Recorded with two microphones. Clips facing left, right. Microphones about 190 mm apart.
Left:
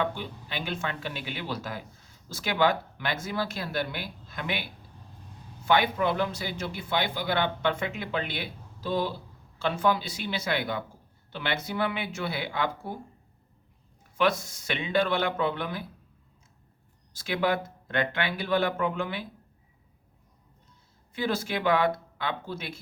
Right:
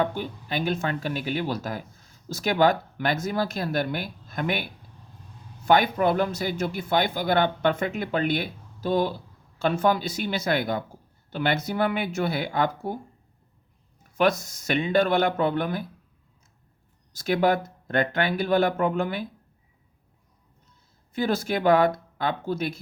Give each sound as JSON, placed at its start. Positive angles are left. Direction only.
{"t": 0.0, "sound": "speech", "side_deg": -45}
{"t": 5.6, "sound": "speech", "side_deg": -45}
{"t": 14.2, "sound": "speech", "side_deg": -40}
{"t": 17.2, "sound": "speech", "side_deg": -45}
{"t": 21.2, "sound": "speech", "side_deg": -45}